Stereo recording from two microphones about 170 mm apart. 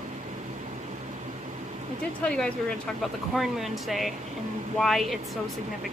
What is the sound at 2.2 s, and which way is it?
Speech, 5° left (ahead or behind).